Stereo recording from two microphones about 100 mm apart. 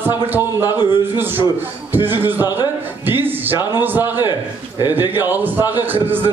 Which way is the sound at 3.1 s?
20° right (ahead or behind).